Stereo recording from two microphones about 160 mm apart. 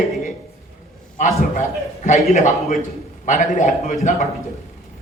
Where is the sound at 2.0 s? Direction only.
45° left (ahead or behind).